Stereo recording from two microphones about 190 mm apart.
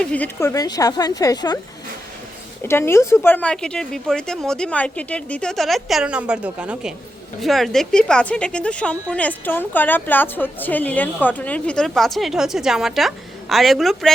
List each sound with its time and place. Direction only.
0.0 s a woman's voice: 5° left (ahead or behind)
2.6 s a woman's voice: 15° left (ahead or behind)